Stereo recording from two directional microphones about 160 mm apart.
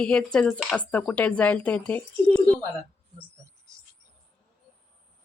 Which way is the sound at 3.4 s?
20° right (ahead or behind).